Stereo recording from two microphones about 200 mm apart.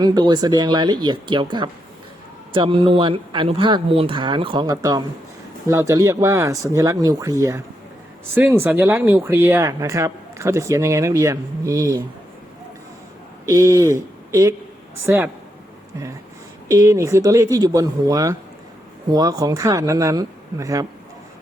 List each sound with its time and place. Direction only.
0.0 s speech: 20° right (ahead or behind)
13.4 s speech: 15° right (ahead or behind)
16.6 s speech: 15° right (ahead or behind)